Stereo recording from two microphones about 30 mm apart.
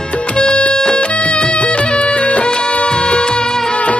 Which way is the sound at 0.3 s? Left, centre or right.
Left.